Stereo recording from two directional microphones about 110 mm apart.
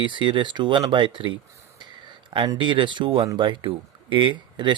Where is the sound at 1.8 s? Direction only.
45° right (ahead or behind).